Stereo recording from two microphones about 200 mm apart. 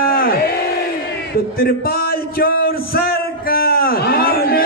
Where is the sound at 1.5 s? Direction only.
50° left (ahead or behind).